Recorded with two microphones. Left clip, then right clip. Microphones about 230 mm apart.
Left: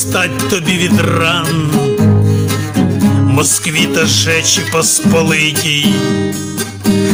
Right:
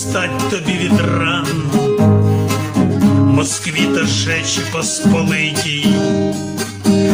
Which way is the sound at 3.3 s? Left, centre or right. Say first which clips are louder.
Left 3 dB; left.